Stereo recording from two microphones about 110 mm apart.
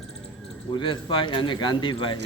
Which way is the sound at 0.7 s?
45° left (ahead or behind).